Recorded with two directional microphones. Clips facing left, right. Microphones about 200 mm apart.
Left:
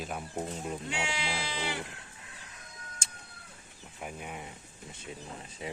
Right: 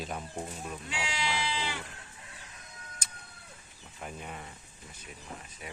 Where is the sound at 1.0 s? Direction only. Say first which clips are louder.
Right 1 dB; 55° left (ahead or behind).